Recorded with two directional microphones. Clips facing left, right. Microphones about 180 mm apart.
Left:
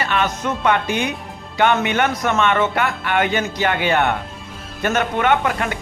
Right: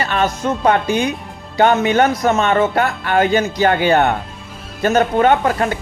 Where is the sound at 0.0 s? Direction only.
35° right (ahead or behind).